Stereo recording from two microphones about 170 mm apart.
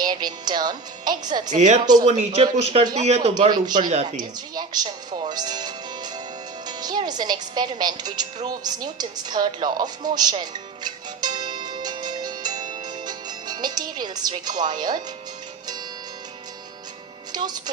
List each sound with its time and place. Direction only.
0.0 s a woman's voice: 25° right (ahead or behind)
1.5 s speech: 45° right (ahead or behind)
1.8 s a woman's voice: 25° right (ahead or behind)
2.0 s speech: 40° right (ahead or behind)
3.3 s a woman's voice: 25° right (ahead or behind)
3.8 s speech: 45° right (ahead or behind)
4.2 s a woman's voice: 25° right (ahead or behind)
10.2 s music: 25° right (ahead or behind)
17.3 s a woman's voice: 25° right (ahead or behind)